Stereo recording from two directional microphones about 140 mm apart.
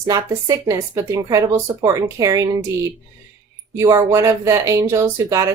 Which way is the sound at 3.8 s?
20° right (ahead or behind).